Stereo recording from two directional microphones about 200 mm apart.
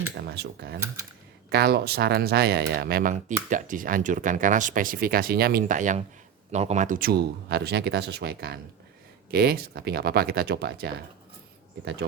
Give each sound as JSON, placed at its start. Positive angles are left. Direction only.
{"t": 0.3, "sound": "speech", "side_deg": -55}